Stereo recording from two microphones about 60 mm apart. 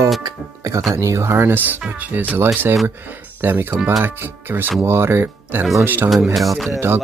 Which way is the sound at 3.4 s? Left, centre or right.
Right.